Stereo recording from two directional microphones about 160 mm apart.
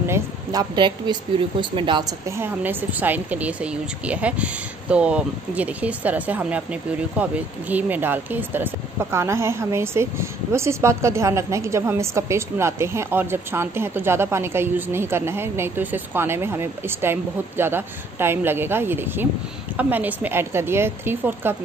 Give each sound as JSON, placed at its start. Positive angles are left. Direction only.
{"t": 0.0, "sound": "a woman's voice", "side_deg": -20}